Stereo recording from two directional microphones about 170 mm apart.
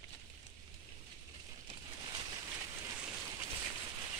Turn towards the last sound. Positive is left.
turn(degrees=-20)  # may be behind; listen again after turning